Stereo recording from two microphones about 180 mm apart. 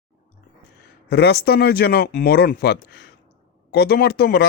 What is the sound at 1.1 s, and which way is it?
Speech, 65° left (ahead or behind).